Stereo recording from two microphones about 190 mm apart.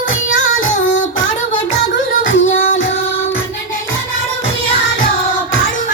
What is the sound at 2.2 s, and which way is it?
Music, 45° left (ahead or behind).